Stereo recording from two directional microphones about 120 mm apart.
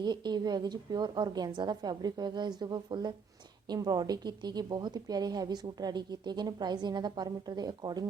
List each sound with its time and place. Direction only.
0.0 s a woman's voice: 35° right (ahead or behind)